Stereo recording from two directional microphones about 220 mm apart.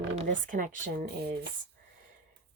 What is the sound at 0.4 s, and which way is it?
Speech, 35° right (ahead or behind).